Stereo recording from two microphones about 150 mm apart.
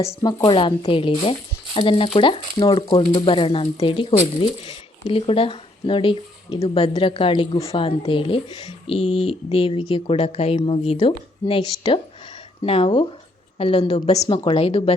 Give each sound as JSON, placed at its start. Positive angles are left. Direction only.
{"t": 0.4, "sound": "speech", "side_deg": 35}
{"t": 14.2, "sound": "speech", "side_deg": 30}